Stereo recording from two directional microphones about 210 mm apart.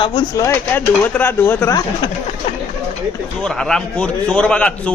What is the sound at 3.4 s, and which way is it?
Speech, centre (ahead or behind).